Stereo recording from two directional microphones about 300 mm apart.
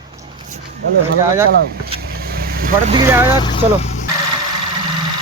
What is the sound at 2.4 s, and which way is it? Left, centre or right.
Vehicle, right.